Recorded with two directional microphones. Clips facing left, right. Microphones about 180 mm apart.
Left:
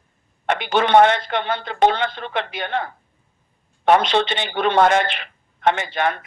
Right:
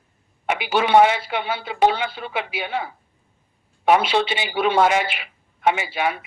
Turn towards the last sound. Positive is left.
turn(degrees=-5)  # may be behind; listen again after turning